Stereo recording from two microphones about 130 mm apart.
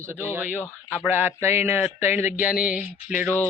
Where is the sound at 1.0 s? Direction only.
15° right (ahead or behind).